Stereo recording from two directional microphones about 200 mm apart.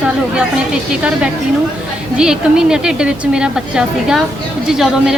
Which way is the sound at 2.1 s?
5° right (ahead or behind).